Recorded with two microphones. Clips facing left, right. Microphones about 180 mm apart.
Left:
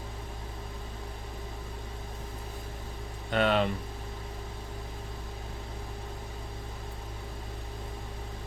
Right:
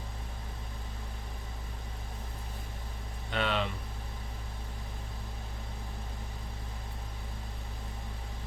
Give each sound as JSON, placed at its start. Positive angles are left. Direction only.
{"t": 3.3, "sound": "vehicle", "side_deg": 45}